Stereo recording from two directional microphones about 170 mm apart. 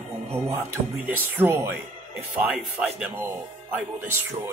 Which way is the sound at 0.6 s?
10° right (ahead or behind).